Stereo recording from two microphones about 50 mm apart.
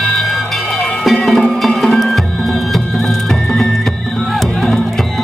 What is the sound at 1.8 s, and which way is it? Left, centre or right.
Music, centre.